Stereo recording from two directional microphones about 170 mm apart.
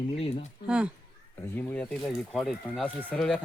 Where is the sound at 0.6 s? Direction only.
5° right (ahead or behind).